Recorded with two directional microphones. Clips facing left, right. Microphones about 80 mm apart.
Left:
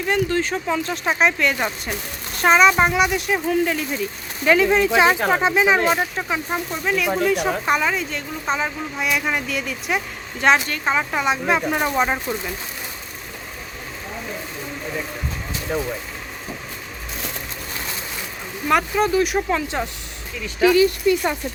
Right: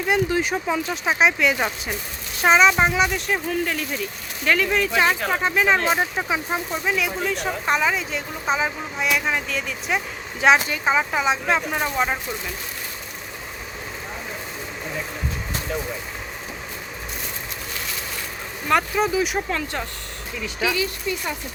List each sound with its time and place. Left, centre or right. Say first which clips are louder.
0.1 s a woman's voice: even; centre
4.4 s speech: left 5 dB; centre
5.9 s a woman's voice: even; centre
11.9 s speech: left 1 dB; centre
15.7 s speech: left 5 dB; left
18.7 s a woman's voice: left 2 dB; centre
20.6 s speech: left 9 dB; left
21.1 s speech: left 9 dB; left